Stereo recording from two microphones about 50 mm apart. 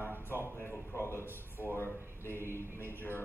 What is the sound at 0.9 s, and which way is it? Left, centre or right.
A man's voice, left.